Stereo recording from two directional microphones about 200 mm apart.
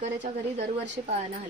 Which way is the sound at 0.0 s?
35° right (ahead or behind).